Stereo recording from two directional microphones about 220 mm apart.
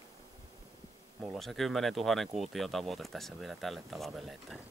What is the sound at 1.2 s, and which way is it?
Speech, centre (ahead or behind).